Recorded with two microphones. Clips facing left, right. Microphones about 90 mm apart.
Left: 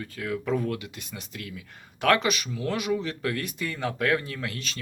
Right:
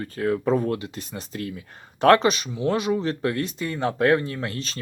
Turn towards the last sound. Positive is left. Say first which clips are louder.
# right 4 dB
turn(degrees=-35)  # may be behind; listen again after turning